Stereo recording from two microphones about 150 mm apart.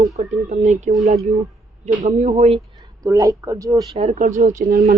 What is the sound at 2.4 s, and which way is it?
Speech, 40° right (ahead or behind).